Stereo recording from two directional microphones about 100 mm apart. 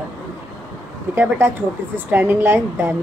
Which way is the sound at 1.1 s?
25° right (ahead or behind).